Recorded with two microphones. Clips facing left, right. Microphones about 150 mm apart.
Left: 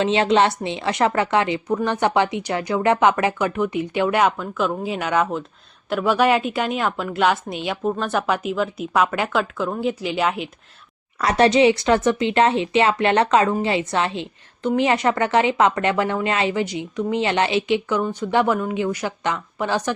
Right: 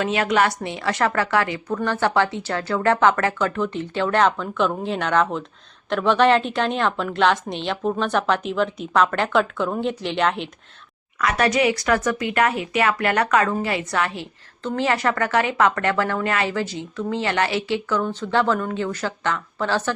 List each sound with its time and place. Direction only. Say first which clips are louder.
0.0 s a woman's voice: left 3 dB; 25° left (ahead or behind); by 10.5 s 5° left (ahead or behind)
11.2 s a woman's voice: left 4 dB; 30° left (ahead or behind); by 19.9 s 15° left (ahead or behind)